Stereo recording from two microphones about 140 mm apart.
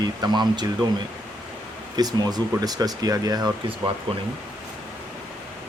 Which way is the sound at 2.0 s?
30° right (ahead or behind).